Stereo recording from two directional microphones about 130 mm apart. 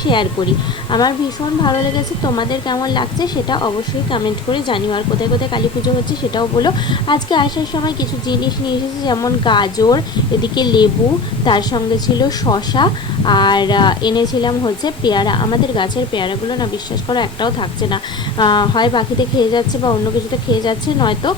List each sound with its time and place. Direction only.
0.0 s a woman's voice: 40° left (ahead or behind)